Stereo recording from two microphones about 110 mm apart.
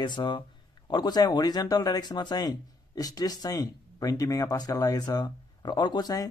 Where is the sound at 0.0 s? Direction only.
45° left (ahead or behind).